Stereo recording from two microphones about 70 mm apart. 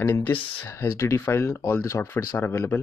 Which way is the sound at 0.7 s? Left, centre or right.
Left.